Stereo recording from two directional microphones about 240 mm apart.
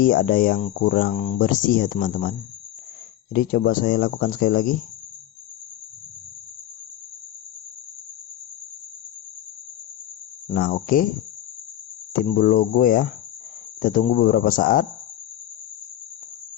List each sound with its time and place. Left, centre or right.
0.0 s speech: left
3.3 s speech: left
10.5 s speech: left
12.2 s speech: left